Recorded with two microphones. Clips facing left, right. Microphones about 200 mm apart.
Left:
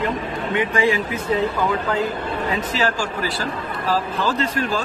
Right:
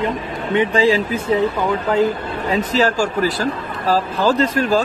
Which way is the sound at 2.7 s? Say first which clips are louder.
Right 5 dB; 40° right (ahead or behind).